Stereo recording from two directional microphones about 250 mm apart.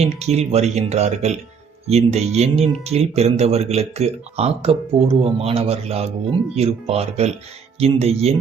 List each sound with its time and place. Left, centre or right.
0.0 s speech: right